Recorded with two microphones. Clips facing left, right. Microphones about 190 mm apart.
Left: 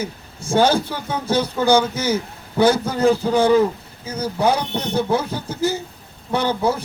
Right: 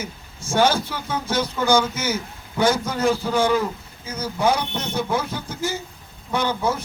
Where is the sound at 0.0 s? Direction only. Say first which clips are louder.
Left 5 dB; 35° left (ahead or behind).